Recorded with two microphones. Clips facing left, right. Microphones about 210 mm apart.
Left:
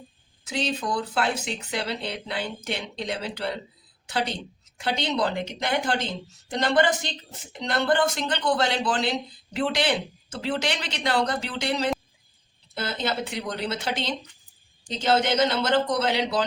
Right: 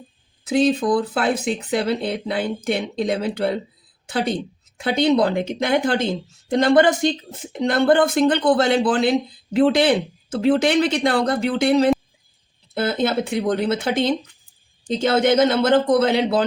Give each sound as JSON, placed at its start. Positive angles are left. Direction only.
{"t": 0.4, "sound": "speech", "side_deg": -55}